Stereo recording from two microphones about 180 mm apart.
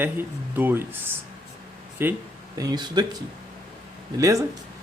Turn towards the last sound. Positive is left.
turn(degrees=-15)  # may be behind; listen again after turning